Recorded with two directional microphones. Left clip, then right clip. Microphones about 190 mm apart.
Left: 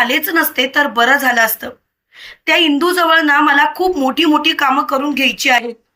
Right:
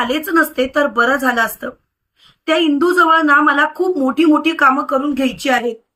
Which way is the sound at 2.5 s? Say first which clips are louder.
Left 2 dB; 5° right (ahead or behind).